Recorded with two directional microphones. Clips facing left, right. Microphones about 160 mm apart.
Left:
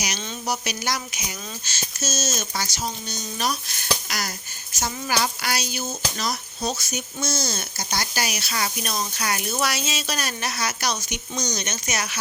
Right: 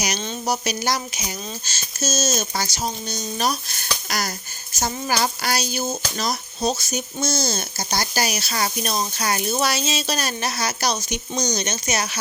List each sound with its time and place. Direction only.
0.0 s speech: 40° right (ahead or behind)